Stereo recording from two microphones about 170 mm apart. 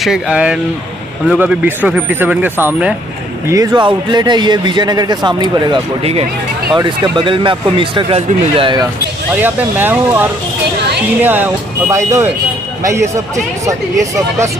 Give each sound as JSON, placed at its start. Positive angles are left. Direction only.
{"t": 0.0, "sound": "speech", "side_deg": -5}
{"t": 3.4, "sound": "speech", "side_deg": -25}
{"t": 9.3, "sound": "speech", "side_deg": -10}
{"t": 11.2, "sound": "speech", "side_deg": -10}